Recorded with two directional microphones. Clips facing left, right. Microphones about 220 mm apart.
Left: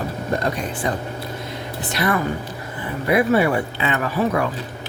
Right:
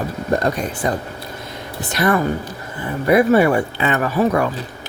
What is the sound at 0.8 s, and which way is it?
Speech, 45° right (ahead or behind).